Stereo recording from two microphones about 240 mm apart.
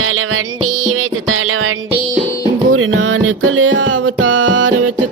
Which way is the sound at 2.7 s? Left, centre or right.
Right.